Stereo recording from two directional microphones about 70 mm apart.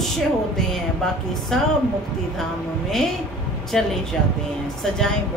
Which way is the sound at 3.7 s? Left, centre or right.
Centre.